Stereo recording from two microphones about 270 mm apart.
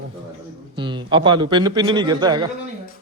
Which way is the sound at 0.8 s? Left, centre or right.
Centre.